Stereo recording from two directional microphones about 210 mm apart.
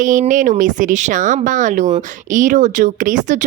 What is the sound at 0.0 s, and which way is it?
Speech, 40° right (ahead or behind).